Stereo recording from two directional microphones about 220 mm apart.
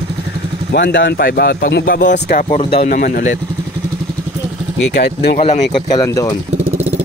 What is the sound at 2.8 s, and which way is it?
Speech, 40° left (ahead or behind).